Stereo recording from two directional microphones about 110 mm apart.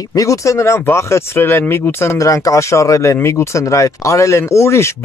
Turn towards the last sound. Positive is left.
turn(degrees=25)  # may be behind; listen again after turning